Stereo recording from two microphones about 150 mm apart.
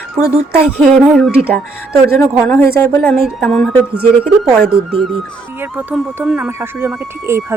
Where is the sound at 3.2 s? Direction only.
Centre (ahead or behind).